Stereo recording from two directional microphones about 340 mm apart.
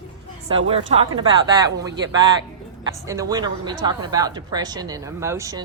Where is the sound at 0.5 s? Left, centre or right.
Centre.